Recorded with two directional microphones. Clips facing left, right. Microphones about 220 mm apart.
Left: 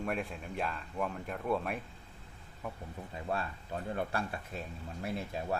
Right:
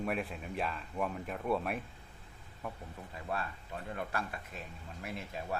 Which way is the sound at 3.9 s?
35° left (ahead or behind).